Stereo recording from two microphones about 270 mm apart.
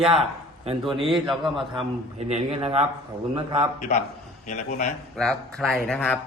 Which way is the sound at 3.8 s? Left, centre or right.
Left.